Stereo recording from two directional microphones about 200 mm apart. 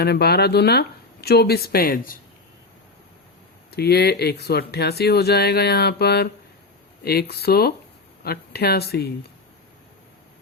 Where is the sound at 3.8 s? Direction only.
55° left (ahead or behind).